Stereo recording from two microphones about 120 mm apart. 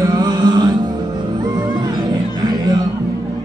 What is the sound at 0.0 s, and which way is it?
Music, 30° right (ahead or behind).